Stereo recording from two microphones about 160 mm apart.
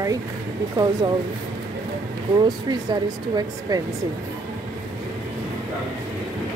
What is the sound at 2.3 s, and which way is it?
Speech, 25° right (ahead or behind).